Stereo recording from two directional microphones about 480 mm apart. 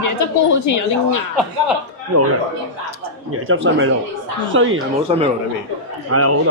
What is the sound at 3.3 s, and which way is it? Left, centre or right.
A man's voice, right.